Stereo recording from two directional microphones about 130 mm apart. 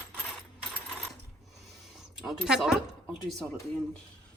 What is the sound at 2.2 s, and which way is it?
Speech, 5° right (ahead or behind).